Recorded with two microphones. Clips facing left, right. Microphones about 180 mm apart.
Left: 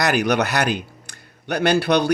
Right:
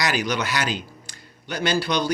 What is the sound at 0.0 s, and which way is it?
Speech, 60° left (ahead or behind).